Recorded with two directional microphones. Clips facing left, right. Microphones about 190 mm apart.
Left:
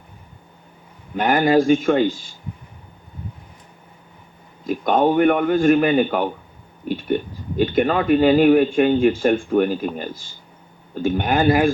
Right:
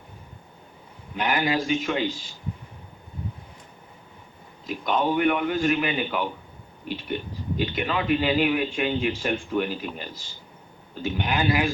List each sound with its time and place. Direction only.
1.1 s speech: 50° left (ahead or behind)
4.6 s speech: 50° left (ahead or behind)